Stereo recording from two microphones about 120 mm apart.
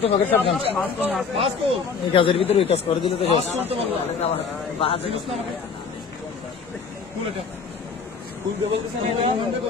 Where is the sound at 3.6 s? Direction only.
55° right (ahead or behind).